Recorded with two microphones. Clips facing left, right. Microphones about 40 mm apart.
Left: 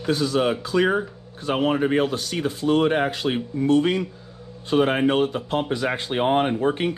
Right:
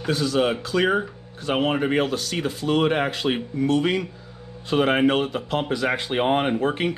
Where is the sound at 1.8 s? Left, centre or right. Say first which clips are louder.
Left 1 dB; right.